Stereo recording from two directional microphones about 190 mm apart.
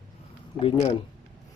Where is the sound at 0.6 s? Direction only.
35° left (ahead or behind).